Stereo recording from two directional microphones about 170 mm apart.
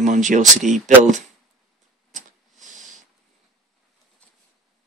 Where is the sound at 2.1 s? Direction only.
45° right (ahead or behind).